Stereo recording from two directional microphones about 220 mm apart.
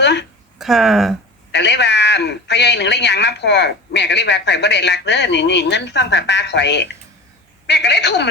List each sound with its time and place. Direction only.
0.0 s a sound: 50° left (ahead or behind)
0.6 s speech: centre (ahead or behind)
1.5 s speech: 50° left (ahead or behind)